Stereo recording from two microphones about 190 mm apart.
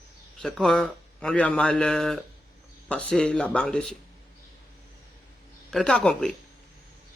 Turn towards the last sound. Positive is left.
turn(degrees=5)  # may be behind; listen again after turning